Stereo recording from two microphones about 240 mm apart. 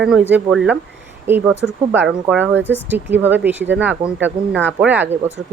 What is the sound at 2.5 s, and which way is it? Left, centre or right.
Speech, right.